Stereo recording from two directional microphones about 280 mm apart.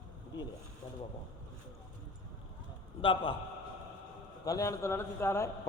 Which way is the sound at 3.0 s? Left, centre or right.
Centre.